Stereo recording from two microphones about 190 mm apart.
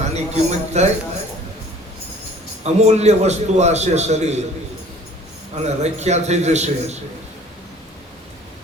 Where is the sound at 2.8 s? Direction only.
35° right (ahead or behind).